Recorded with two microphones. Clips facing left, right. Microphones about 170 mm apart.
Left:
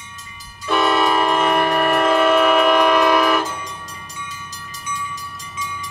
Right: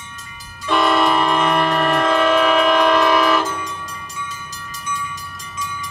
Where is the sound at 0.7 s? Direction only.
5° left (ahead or behind).